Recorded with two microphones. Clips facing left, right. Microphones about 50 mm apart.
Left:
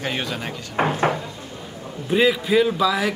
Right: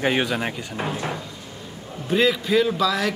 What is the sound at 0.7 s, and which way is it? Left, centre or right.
Speech, left.